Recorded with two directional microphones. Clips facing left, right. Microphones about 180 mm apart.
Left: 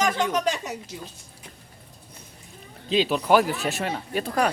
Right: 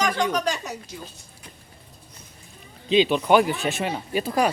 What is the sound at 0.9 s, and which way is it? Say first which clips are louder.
Speech: even; 20° left (ahead or behind).